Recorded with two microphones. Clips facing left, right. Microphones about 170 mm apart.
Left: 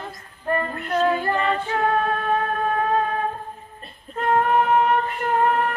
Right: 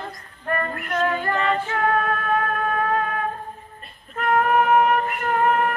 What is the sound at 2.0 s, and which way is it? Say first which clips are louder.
Music: left 1 dB; 25° left (ahead or behind).